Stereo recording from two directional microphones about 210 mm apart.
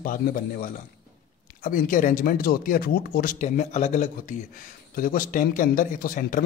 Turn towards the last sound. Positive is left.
turn(degrees=40)  # may be behind; listen again after turning